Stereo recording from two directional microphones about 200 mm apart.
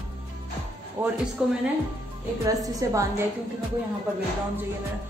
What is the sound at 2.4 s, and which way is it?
Speech, 20° right (ahead or behind).